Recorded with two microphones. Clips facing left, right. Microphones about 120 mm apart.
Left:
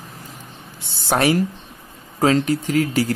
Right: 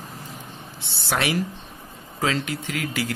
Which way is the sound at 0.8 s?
45° left (ahead or behind).